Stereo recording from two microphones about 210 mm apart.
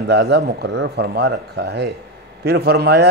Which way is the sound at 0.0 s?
50° right (ahead or behind).